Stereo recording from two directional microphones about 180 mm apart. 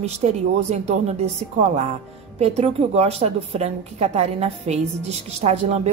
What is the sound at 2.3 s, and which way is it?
A woman's voice, 35° right (ahead or behind).